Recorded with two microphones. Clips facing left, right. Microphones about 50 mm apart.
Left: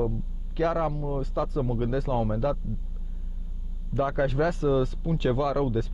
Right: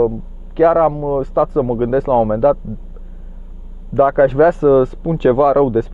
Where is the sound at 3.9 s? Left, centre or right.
Right.